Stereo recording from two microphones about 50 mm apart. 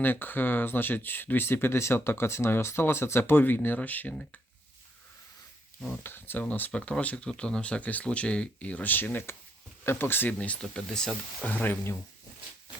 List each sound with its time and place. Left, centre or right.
0.0 s speech: left
5.9 s speech: left
6.4 s speech: left
10.6 s speech: centre
11.4 s speech: left